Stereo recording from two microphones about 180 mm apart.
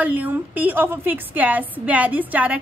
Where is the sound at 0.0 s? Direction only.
10° right (ahead or behind).